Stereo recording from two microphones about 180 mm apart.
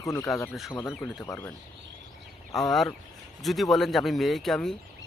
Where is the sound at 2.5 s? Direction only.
Centre (ahead or behind).